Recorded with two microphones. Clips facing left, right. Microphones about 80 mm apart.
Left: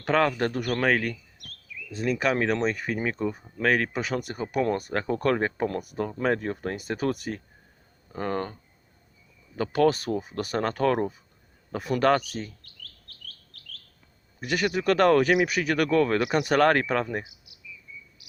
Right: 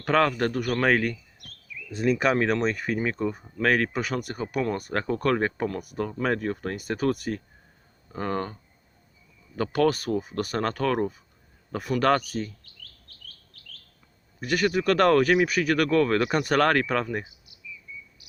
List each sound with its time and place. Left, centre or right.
0.1 s speech: centre
0.6 s speech: centre
3.9 s speech: centre
5.6 s speech: left
6.2 s speech: centre
9.6 s speech: centre
12.6 s chirp: left
14.4 s speech: centre